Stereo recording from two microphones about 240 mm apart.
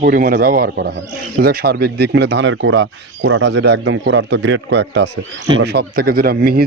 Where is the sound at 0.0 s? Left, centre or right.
Right.